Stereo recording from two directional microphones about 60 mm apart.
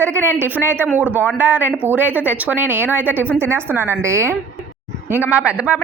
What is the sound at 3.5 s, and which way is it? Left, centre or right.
Speech, right.